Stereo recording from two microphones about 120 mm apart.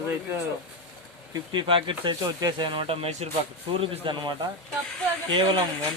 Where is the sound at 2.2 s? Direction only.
30° right (ahead or behind); by 3.2 s 60° right (ahead or behind).